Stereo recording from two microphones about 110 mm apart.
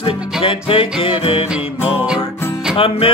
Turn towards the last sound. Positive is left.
turn(degrees=60)  # may be behind; listen again after turning